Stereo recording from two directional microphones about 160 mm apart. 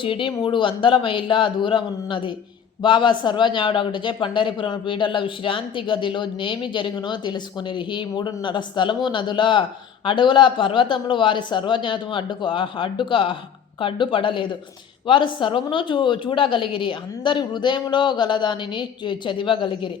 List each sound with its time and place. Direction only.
0.0 s a woman's voice: 35° left (ahead or behind)